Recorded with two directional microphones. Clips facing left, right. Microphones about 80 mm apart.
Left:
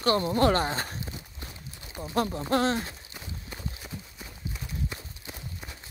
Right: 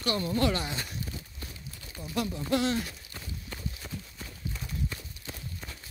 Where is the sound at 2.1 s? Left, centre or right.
Left.